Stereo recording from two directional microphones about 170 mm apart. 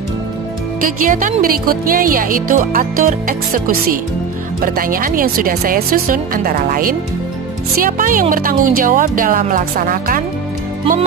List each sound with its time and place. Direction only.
0.8 s speech: 55° right (ahead or behind)